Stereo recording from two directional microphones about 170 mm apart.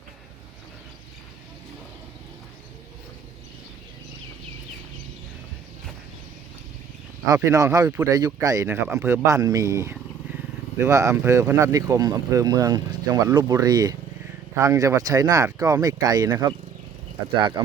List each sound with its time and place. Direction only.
7.3 s speech: 20° right (ahead or behind)